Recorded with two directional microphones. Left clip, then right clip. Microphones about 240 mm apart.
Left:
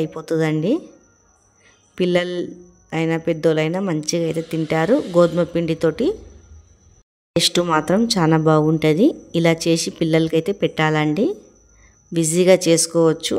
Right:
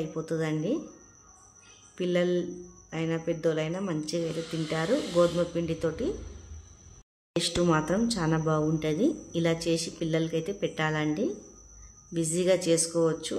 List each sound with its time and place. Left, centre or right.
0.0 s speech: left
2.0 s speech: left
7.3 s speech: left